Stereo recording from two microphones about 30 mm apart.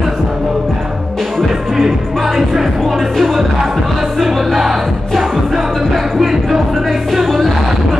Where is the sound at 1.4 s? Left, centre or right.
Centre.